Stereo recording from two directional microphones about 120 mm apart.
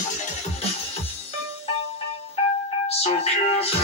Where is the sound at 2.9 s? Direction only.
60° left (ahead or behind).